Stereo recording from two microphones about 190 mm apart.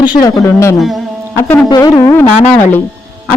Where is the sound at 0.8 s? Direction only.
Centre (ahead or behind).